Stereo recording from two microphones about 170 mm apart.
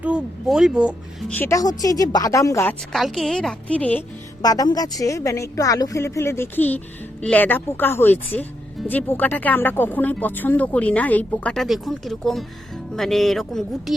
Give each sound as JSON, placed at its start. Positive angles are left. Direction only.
{"t": 0.0, "sound": "speech", "side_deg": -5}
{"t": 1.3, "sound": "a woman's voice", "side_deg": 15}
{"t": 2.9, "sound": "a woman's voice", "side_deg": 0}
{"t": 4.4, "sound": "speech", "side_deg": 20}